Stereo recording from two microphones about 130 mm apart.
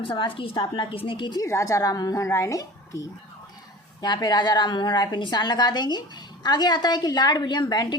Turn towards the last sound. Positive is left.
turn(degrees=30)  # may be behind; listen again after turning